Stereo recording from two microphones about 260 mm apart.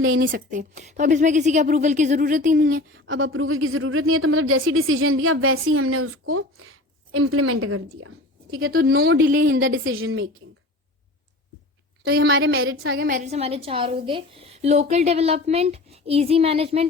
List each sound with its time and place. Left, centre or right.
0.0 s a woman's voice: right
0.3 s a woman's voice: right
2.9 s a woman's voice: right
8.4 s a woman's voice: right
10.0 s a woman's voice: right
12.0 s a woman's voice: right